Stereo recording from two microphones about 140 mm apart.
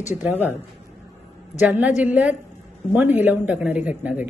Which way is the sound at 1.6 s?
10° right (ahead or behind).